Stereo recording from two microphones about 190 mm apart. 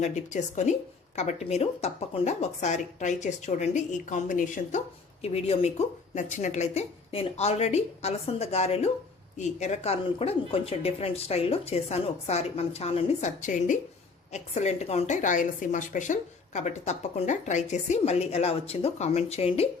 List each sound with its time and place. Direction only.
0.0 s a woman's voice: 40° left (ahead or behind)
5.2 s a woman's voice: 35° left (ahead or behind)